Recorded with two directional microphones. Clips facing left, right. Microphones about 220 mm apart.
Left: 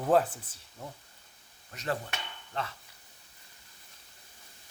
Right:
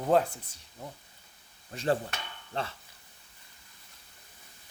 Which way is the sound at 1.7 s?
30° right (ahead or behind).